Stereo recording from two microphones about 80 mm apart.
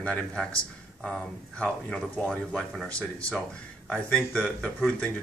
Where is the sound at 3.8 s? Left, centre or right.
Centre.